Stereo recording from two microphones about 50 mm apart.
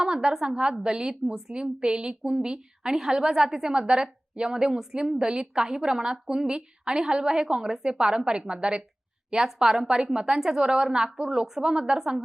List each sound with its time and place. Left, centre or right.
0.0 s a woman's voice: centre